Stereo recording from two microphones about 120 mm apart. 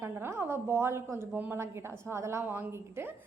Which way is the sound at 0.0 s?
20° right (ahead or behind).